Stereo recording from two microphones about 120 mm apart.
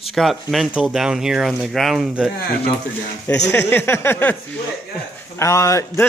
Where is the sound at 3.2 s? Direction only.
20° left (ahead or behind).